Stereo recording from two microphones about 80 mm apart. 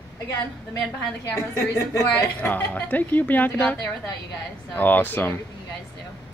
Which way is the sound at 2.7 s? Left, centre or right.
Left.